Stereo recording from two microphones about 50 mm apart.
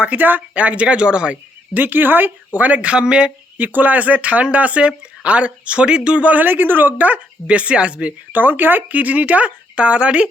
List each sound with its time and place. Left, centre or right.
0.0 s speech: right
1.7 s speech: right; by 3.3 s centre
3.6 s speech: right
6.3 s speech: right
7.4 s speech: right
8.3 s speech: right